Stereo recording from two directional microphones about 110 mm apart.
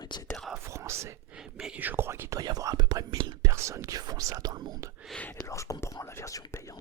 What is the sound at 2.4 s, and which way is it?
Whispering, 35° right (ahead or behind).